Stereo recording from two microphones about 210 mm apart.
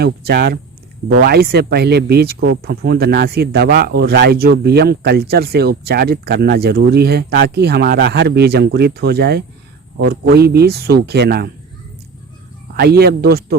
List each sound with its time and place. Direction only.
0.0 s speech: 50° right (ahead or behind)
12.7 s speech: 50° right (ahead or behind)